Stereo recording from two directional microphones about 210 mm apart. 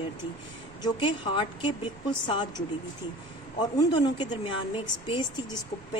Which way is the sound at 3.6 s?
20° left (ahead or behind).